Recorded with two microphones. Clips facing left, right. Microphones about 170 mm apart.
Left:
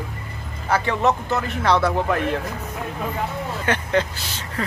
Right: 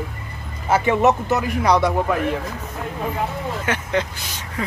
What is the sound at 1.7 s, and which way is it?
Speech, centre (ahead or behind).